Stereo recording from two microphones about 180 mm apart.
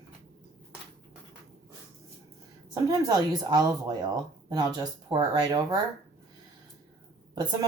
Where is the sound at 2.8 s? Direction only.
20° right (ahead or behind).